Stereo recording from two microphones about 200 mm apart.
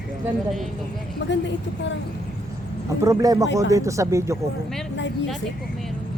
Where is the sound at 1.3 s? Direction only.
65° left (ahead or behind).